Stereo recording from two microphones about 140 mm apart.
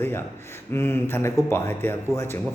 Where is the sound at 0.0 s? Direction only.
15° left (ahead or behind).